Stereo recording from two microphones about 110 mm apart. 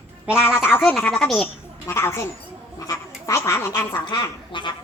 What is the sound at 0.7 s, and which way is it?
Speech, 20° left (ahead or behind).